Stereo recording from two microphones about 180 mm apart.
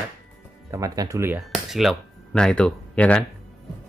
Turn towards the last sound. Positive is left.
turn(degrees=5)  # may be behind; listen again after turning